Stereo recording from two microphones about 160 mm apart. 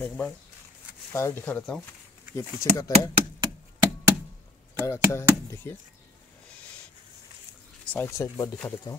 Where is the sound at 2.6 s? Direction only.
20° left (ahead or behind).